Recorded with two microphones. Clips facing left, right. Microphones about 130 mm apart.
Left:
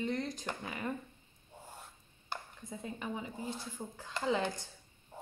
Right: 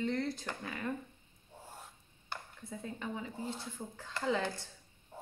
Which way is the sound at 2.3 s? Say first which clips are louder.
Left 1 dB; 15° left (ahead or behind).